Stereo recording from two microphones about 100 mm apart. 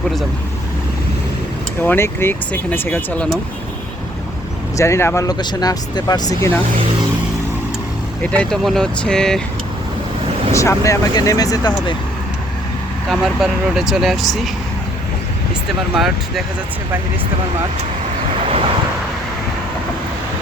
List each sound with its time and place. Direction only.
1.8 s speech: 20° left (ahead or behind)
4.8 s speech: 25° left (ahead or behind)
5.3 s speech: 45° left (ahead or behind)
8.2 s speech: 10° left (ahead or behind)
10.5 s speech: 30° left (ahead or behind)
13.1 s speech: centre (ahead or behind)
16.0 s speech: centre (ahead or behind)